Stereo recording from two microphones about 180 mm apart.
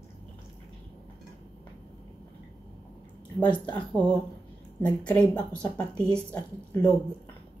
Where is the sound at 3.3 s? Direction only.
25° left (ahead or behind).